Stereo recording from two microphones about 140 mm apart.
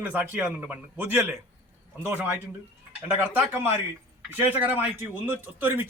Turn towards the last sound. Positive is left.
turn(degrees=-15)  # may be behind; listen again after turning